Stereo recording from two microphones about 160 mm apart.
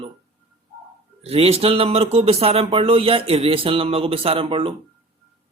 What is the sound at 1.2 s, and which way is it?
Speech, 40° right (ahead or behind).